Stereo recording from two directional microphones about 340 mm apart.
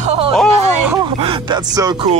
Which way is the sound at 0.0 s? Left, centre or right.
Centre.